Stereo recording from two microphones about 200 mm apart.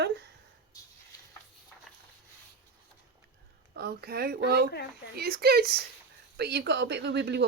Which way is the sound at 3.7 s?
55° right (ahead or behind).